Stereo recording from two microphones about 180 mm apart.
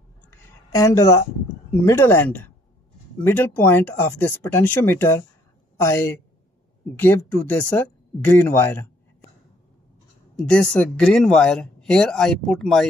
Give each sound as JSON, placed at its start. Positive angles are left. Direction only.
{"t": 0.7, "sound": "speech", "side_deg": 15}
{"t": 10.3, "sound": "speech", "side_deg": 5}